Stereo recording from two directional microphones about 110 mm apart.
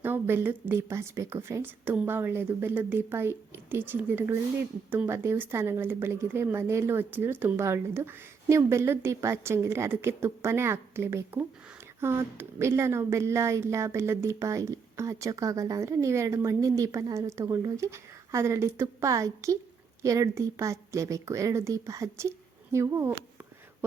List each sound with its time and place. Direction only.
0.0 s a woman's voice: 20° right (ahead or behind)